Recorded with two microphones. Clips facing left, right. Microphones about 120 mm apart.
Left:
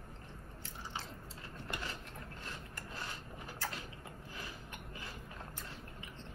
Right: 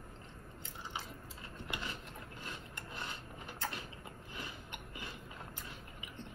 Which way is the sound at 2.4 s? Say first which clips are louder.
Even; 20° right (ahead or behind).